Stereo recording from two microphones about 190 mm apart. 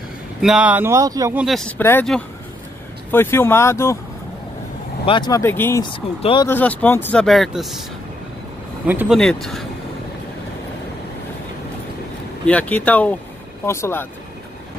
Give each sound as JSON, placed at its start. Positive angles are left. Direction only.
{"t": 0.4, "sound": "speech", "side_deg": -5}
{"t": 1.3, "sound": "speech", "side_deg": 0}
{"t": 3.1, "sound": "speech", "side_deg": 10}
{"t": 5.0, "sound": "speech", "side_deg": 25}
{"t": 5.9, "sound": "speech", "side_deg": 25}
{"t": 6.4, "sound": "speech", "side_deg": 10}
{"t": 8.8, "sound": "speech", "side_deg": -10}
{"t": 9.2, "sound": "speech", "side_deg": 5}
{"t": 12.4, "sound": "speech", "side_deg": 10}